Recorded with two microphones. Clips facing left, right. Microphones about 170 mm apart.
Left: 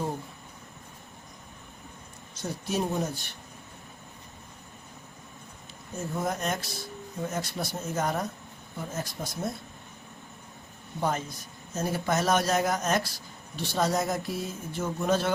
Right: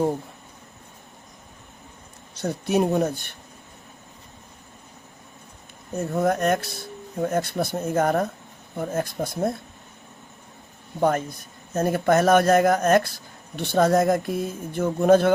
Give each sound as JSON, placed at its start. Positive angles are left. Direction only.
{"t": 2.3, "sound": "speech", "side_deg": -65}
{"t": 6.1, "sound": "speech", "side_deg": -60}
{"t": 11.0, "sound": "speech", "side_deg": -55}